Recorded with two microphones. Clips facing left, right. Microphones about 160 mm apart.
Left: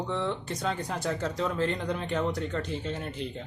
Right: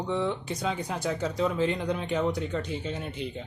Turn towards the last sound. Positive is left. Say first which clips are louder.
# even
turn(degrees=0)  # may be behind; listen again after turning